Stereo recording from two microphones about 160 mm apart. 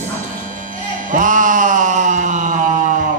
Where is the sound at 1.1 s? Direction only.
55° right (ahead or behind).